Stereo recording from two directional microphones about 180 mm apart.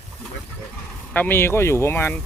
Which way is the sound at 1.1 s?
10° left (ahead or behind).